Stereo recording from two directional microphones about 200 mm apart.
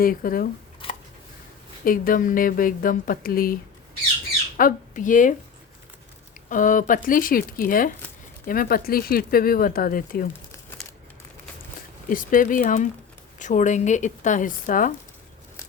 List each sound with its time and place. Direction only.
0.0 s speech: 45° left (ahead or behind)
0.8 s a sound: 30° left (ahead or behind)
1.8 s speech: 45° left (ahead or behind)
6.5 s speech: 40° left (ahead or behind)
12.0 s speech: 40° left (ahead or behind)